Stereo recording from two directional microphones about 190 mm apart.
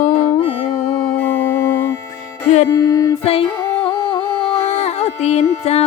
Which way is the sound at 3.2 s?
30° left (ahead or behind).